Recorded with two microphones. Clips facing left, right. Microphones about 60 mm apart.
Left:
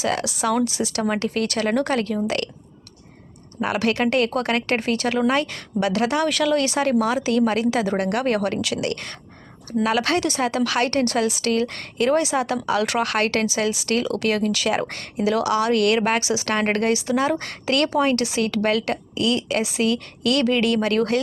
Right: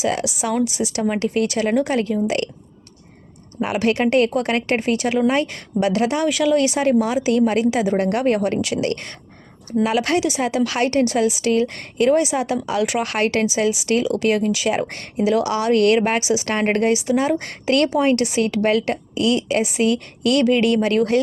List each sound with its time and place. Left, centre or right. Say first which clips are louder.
0.0 s a woman's voice: right 1 dB; centre
3.6 s a woman's voice: right 2 dB; right